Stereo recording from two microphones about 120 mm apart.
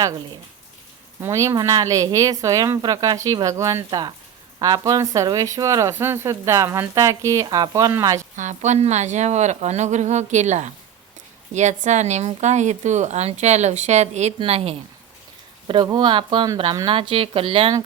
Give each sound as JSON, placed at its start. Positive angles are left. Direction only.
{"t": 1.2, "sound": "speech", "side_deg": -25}
{"t": 3.8, "sound": "speech", "side_deg": -40}
{"t": 8.4, "sound": "a woman's voice", "side_deg": -85}
{"t": 14.3, "sound": "a woman's voice", "side_deg": -55}
{"t": 15.6, "sound": "speech", "side_deg": -45}